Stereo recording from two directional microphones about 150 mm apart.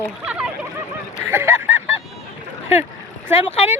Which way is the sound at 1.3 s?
15° right (ahead or behind).